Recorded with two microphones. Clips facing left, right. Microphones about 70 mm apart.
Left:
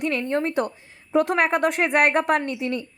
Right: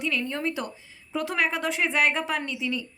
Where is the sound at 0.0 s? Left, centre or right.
Left.